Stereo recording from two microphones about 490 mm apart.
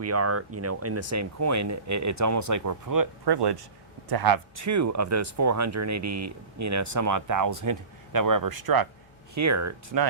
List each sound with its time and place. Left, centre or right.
0.0 s speech: right
9.3 s speech: right